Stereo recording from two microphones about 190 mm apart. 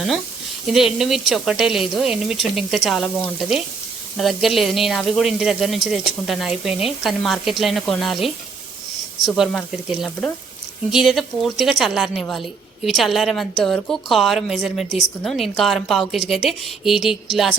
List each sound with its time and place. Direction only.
0.7 s speech: centre (ahead or behind)
4.2 s speech: centre (ahead or behind)